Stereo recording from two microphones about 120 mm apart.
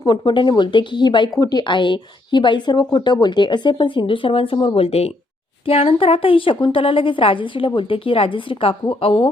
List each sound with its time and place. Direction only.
0.0 s a woman's voice: 40° left (ahead or behind)